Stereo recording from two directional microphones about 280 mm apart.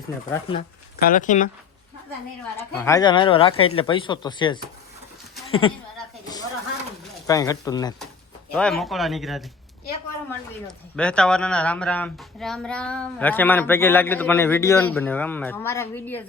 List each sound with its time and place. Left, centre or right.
0.3 s speech: centre
2.6 s speech: centre
7.3 s speech: centre
8.5 s speech: centre
10.7 s speech: centre